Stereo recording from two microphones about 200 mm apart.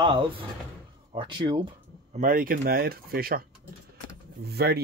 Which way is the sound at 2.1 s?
40° right (ahead or behind).